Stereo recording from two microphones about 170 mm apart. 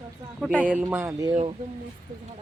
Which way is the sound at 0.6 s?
10° right (ahead or behind).